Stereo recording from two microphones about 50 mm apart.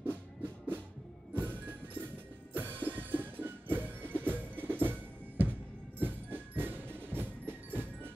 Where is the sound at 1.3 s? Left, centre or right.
Right.